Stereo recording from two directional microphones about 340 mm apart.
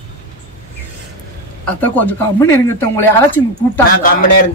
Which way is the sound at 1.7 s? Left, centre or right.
Centre.